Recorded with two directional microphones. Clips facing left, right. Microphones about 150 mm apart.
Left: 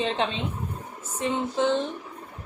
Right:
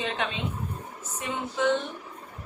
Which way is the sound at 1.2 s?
30° left (ahead or behind).